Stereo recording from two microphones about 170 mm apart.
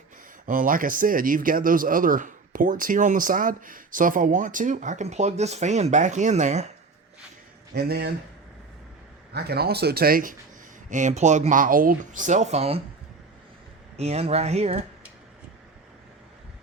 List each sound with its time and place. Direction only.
0.4 s speech: 55° right (ahead or behind)
7.7 s speech: 70° right (ahead or behind)
9.3 s speech: 70° right (ahead or behind)
10.8 s speech: 45° right (ahead or behind)
13.9 s speech: 40° right (ahead or behind)